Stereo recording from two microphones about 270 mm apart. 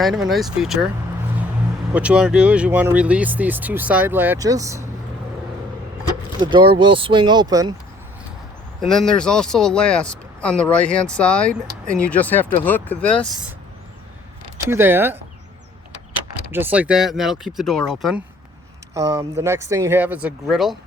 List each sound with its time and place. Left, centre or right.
0.0 s speech: centre
1.9 s speech: centre
6.4 s speech: centre
8.8 s speech: centre
14.7 s speech: centre
16.5 s speech: centre
18.9 s speech: centre